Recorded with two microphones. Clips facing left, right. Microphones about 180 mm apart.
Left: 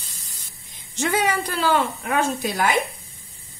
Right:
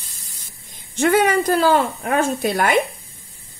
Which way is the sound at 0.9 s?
60° right (ahead or behind).